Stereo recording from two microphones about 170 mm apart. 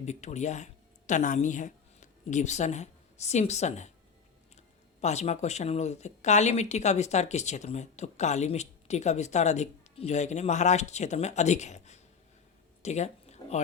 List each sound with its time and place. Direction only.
0.0 s speech: 45° left (ahead or behind)
4.9 s speech: 40° left (ahead or behind)
12.8 s a sound: 40° left (ahead or behind)